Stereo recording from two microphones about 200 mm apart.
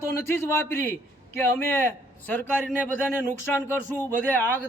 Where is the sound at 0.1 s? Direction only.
10° left (ahead or behind).